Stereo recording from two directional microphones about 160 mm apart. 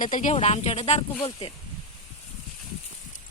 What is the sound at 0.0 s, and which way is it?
Speech, 55° left (ahead or behind).